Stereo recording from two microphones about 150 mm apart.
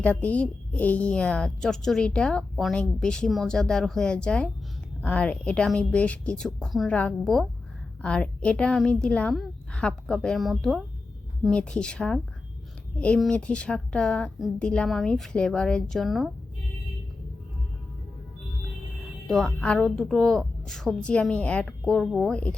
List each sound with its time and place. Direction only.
0.0 s a woman's voice: 10° left (ahead or behind)
19.3 s a woman's voice: 5° left (ahead or behind)